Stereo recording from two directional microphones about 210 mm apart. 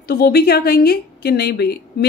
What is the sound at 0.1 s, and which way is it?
Speech, 50° left (ahead or behind).